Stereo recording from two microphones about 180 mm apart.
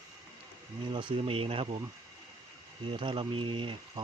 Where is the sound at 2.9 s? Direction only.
30° right (ahead or behind).